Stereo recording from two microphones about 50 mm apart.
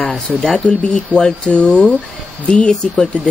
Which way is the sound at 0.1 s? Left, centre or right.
Centre.